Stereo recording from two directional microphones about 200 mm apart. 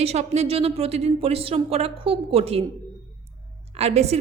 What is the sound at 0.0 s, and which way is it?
A woman's voice, 30° right (ahead or behind).